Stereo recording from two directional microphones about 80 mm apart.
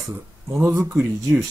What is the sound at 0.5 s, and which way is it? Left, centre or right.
Speech, right.